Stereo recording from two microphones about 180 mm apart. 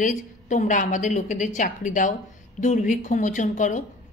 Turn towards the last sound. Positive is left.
turn(degrees=45)  # may be behind; listen again after turning